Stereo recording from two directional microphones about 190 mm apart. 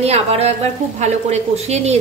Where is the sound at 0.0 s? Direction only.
35° right (ahead or behind).